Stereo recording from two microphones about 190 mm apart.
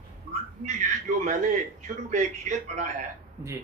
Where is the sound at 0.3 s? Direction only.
40° right (ahead or behind).